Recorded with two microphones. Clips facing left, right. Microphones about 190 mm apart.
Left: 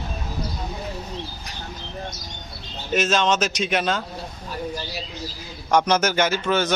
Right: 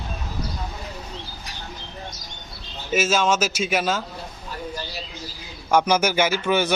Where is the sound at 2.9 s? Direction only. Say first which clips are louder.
Even; 5° right (ahead or behind).